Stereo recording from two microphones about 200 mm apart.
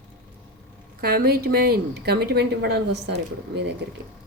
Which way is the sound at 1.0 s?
50° right (ahead or behind).